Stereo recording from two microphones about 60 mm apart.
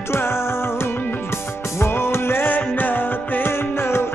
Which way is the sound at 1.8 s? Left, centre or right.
Left.